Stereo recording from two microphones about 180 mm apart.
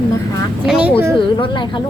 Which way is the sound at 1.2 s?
25° left (ahead or behind).